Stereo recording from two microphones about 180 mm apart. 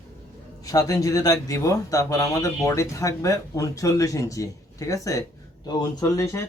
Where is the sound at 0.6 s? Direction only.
20° left (ahead or behind).